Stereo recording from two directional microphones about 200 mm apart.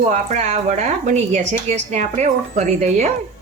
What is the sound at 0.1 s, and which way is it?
A woman's voice, 35° right (ahead or behind).